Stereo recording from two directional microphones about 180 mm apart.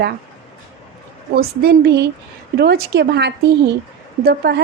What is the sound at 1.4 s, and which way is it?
A woman's voice, 65° right (ahead or behind).